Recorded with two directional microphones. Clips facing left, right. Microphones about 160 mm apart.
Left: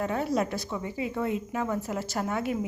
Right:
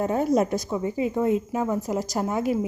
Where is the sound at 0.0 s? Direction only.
40° right (ahead or behind).